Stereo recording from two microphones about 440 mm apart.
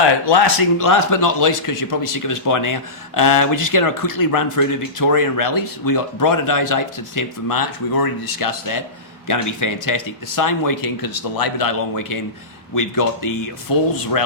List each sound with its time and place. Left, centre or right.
0.3 s speech: left